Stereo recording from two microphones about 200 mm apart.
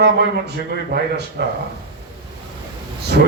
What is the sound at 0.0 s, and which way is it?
A man's voice, 55° right (ahead or behind).